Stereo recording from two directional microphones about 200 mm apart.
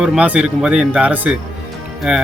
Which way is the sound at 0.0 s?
5° right (ahead or behind).